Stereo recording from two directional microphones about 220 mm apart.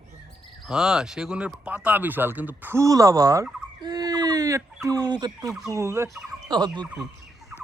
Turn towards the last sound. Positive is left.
turn(degrees=-20)  # may be behind; listen again after turning